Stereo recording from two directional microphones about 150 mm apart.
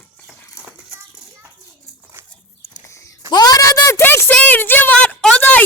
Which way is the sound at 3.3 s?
25° left (ahead or behind).